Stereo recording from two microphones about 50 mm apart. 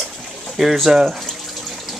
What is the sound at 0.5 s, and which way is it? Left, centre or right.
Speech, centre.